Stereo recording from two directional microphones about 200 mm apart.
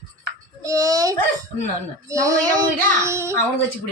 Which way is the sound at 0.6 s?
15° right (ahead or behind).